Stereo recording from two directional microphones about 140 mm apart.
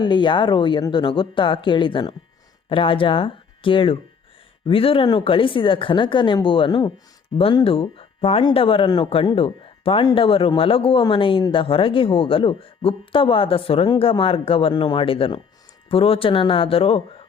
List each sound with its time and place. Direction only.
0.0 s speech: 35° left (ahead or behind)
7.3 s speech: 40° left (ahead or behind)